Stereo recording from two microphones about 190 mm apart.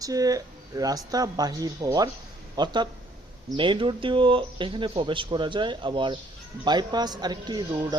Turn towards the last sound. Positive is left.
turn(degrees=-20)  # may be behind; listen again after turning